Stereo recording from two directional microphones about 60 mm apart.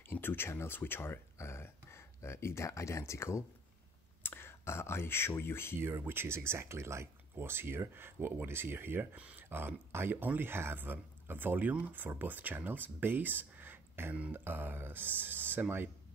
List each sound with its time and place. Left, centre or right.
0.1 s speech: left
4.2 s speech: left
6.0 s speech: right
14.1 s a sound: right
14.4 s speech: right